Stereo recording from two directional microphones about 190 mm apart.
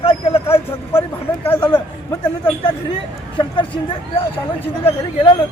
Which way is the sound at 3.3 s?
25° left (ahead or behind).